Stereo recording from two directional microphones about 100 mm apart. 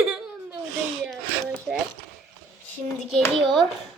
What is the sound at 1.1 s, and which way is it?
Speech, 5° left (ahead or behind).